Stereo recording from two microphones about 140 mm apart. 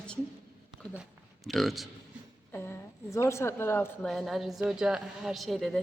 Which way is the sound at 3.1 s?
20° left (ahead or behind).